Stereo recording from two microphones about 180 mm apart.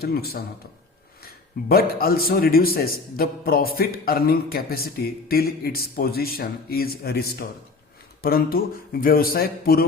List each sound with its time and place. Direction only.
0.0 s a man's voice: 60° left (ahead or behind)